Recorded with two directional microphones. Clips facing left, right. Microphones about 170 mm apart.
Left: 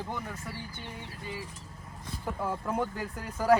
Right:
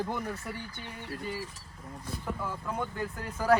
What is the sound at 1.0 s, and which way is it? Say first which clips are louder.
Speech: right 6 dB; 55° right (ahead or behind).